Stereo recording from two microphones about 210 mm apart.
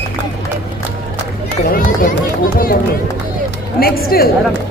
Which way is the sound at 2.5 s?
45° left (ahead or behind).